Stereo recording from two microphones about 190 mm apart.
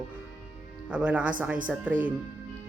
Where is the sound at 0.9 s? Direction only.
5° right (ahead or behind).